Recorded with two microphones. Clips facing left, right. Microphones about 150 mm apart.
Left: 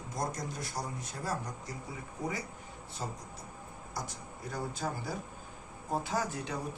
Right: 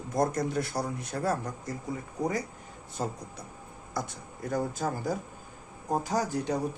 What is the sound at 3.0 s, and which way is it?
Speech, 50° right (ahead or behind).